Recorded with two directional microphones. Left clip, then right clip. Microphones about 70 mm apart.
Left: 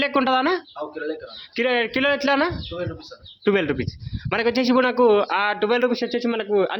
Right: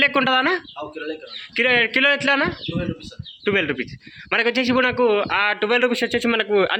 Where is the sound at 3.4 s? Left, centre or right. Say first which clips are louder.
Even; left.